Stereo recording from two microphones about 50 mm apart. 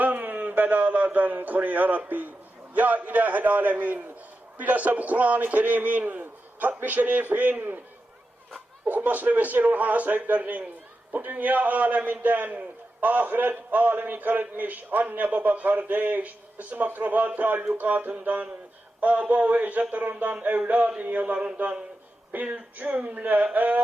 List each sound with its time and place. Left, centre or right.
0.0 s a man's voice: right
8.9 s a man's voice: right
22.3 s a man's voice: right